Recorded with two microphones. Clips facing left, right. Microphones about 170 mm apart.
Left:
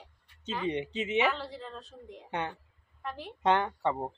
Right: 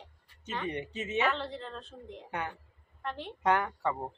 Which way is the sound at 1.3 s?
5° left (ahead or behind).